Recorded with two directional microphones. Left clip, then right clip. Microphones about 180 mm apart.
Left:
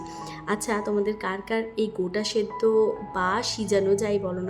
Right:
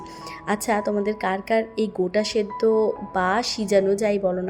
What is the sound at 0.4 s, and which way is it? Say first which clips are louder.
A woman's voice: right 4 dB; 20° right (ahead or behind).